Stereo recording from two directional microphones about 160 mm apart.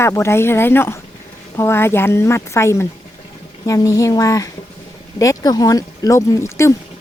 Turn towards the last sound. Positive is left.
turn(degrees=20)  # may be behind; listen again after turning